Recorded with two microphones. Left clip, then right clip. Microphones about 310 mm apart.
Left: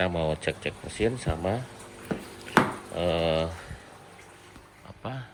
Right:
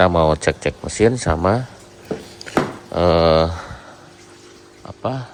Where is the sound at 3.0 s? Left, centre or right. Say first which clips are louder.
Right 12 dB; right.